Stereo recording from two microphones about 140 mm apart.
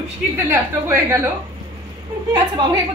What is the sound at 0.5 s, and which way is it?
Speech, 20° right (ahead or behind).